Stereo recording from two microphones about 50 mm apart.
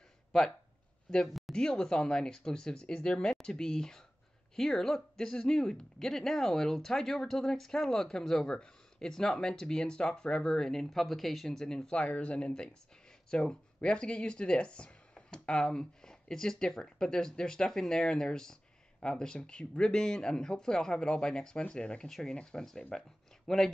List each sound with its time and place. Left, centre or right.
1.1 s speech: centre
11.6 s speech: centre